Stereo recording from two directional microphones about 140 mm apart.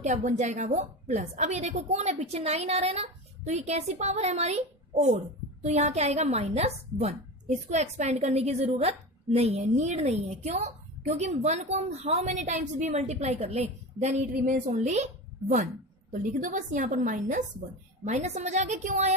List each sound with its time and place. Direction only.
0.0 s a woman's voice: 60° right (ahead or behind)
14.3 s a woman's voice: 65° right (ahead or behind)
18.0 s a woman's voice: 50° right (ahead or behind)